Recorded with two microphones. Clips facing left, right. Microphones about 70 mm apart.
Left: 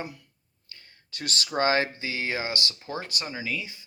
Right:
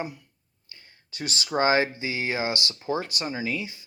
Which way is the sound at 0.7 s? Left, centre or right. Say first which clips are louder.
Left 1 dB; centre.